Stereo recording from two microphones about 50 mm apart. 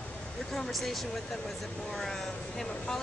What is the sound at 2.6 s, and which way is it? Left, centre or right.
Speech, centre.